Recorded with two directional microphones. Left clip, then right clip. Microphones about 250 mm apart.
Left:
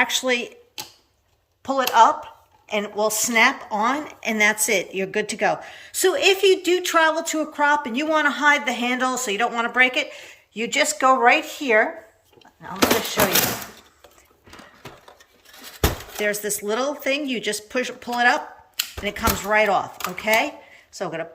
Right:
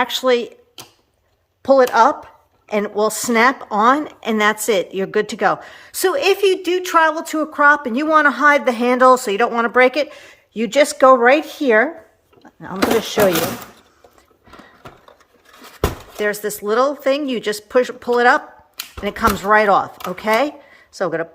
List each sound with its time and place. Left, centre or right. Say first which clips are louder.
0.0 s a woman's voice: right 4 dB; centre
1.6 s a woman's voice: right 4 dB; right
15.8 s a woman's voice: right 3 dB; centre